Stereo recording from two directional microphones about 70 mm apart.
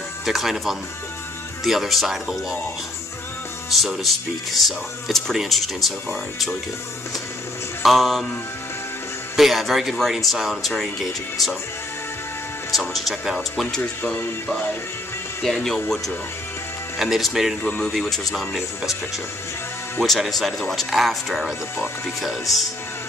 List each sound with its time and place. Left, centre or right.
0.2 s speech: centre
3.8 s speech: centre
7.8 s speech: centre
9.4 s speech: centre
12.7 s speech: centre
13.7 s speech: centre
15.4 s speech: centre
17.0 s speech: centre
17.6 s speech: centre
17.9 s speech: centre
20.0 s speech: centre